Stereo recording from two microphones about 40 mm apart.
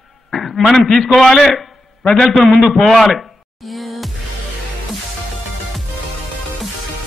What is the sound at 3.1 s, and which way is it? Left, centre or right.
Music, centre.